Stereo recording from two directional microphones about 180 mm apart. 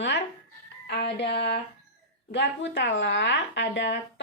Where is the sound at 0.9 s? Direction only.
70° left (ahead or behind).